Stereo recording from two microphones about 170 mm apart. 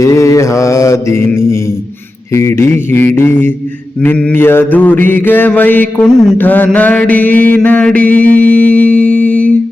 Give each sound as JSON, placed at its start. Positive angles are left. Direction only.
{"t": 0.0, "sound": "mantra", "side_deg": 20}